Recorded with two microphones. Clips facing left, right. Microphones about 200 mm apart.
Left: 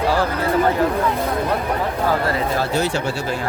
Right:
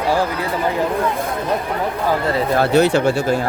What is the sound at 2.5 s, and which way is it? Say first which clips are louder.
Speech: right 6 dB; 65° right (ahead or behind).